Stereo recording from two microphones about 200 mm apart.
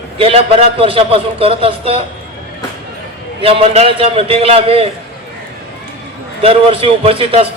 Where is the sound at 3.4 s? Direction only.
30° right (ahead or behind).